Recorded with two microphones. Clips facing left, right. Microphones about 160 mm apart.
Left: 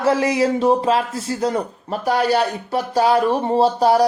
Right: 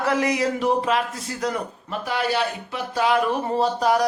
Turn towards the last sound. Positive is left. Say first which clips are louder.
# left 5 dB
turn(degrees=30)  # may be behind; listen again after turning